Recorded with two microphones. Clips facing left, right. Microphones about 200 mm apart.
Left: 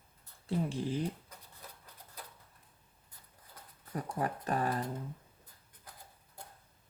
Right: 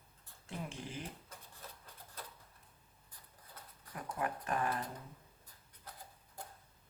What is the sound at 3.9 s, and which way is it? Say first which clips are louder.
Speech: left 4 dB; 35° left (ahead or behind).